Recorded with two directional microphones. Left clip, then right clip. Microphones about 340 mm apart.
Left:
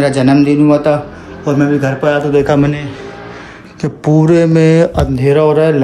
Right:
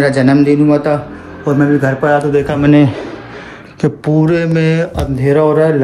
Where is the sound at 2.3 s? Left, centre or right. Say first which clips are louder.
Left 3 dB; centre.